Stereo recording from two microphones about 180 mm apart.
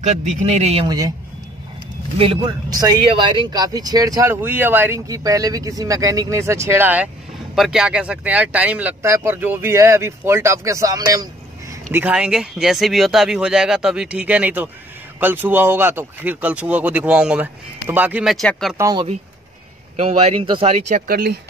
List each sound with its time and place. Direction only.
0.0 s speech: 40° right (ahead or behind)
0.8 s speech: 20° right (ahead or behind)
2.1 s speech: 30° right (ahead or behind); by 18.8 s centre (ahead or behind)
18.8 s speech: 20° right (ahead or behind)
20.0 s speech: 35° right (ahead or behind)
20.9 s speech: 55° right (ahead or behind)